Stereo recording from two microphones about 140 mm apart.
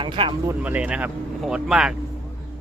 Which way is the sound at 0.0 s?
35° right (ahead or behind).